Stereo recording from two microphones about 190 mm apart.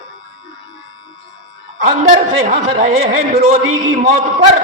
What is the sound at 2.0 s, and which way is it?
A man's voice, 40° right (ahead or behind).